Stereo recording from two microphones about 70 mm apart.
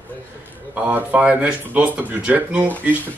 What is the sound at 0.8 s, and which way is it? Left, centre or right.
Speech, right.